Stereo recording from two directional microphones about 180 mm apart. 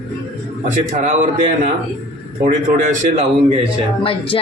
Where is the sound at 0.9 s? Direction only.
45° right (ahead or behind).